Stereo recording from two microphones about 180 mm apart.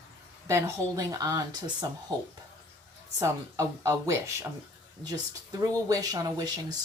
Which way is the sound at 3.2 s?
15° right (ahead or behind).